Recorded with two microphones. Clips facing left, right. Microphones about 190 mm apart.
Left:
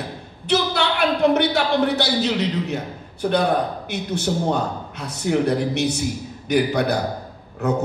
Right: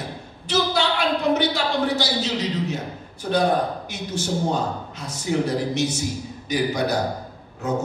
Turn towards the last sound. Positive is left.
turn(degrees=60)  # may be behind; listen again after turning